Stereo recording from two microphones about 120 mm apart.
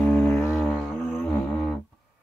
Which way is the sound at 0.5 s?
5° right (ahead or behind).